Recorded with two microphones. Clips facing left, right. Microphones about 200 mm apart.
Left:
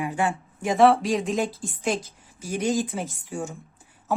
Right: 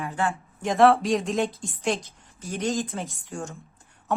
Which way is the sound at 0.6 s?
Centre (ahead or behind).